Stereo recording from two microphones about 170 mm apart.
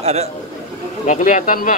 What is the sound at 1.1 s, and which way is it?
Speech, 50° left (ahead or behind).